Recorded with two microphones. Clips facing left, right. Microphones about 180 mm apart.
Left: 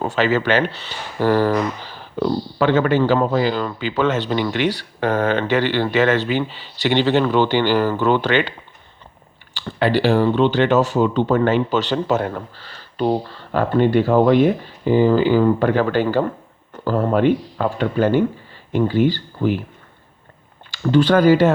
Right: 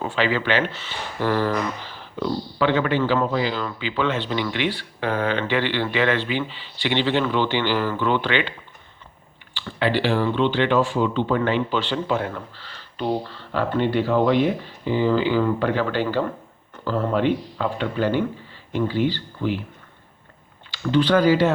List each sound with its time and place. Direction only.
0.0 s speech: 45° left (ahead or behind)
9.6 s speech: 40° left (ahead or behind)
20.7 s speech: 45° left (ahead or behind)